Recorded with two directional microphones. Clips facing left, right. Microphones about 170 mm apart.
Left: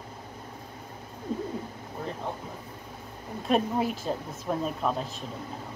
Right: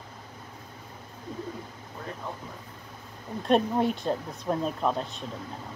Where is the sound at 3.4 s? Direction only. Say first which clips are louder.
Right 2 dB; 5° left (ahead or behind).